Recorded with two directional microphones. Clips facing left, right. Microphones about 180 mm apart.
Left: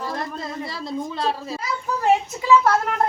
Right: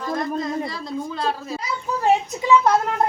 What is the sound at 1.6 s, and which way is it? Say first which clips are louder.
A child's voice: even; 20° right (ahead or behind).